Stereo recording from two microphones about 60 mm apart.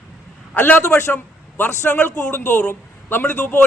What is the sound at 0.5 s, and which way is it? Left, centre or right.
Speech, left.